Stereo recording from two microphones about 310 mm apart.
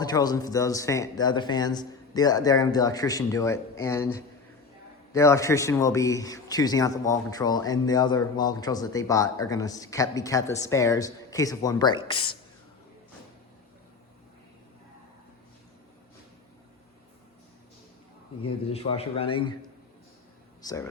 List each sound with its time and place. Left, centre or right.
0.0 s a man's voice: centre
18.4 s a man's voice: centre
20.6 s speech: centre